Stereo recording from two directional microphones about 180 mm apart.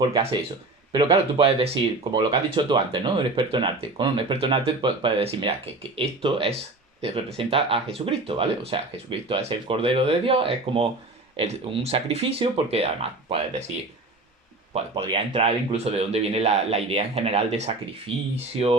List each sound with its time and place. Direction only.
0.0 s speech: 30° right (ahead or behind)
14.7 s speech: 30° right (ahead or behind)